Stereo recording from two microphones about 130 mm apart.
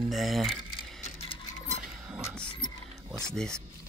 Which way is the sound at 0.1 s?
Centre (ahead or behind).